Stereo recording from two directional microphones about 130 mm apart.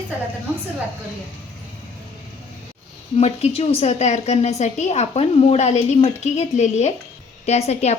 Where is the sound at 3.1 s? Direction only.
50° left (ahead or behind).